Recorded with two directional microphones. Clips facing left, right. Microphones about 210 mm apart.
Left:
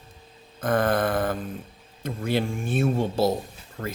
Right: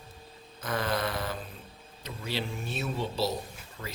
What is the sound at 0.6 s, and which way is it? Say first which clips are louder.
Speech: left 8 dB; 50° left (ahead or behind).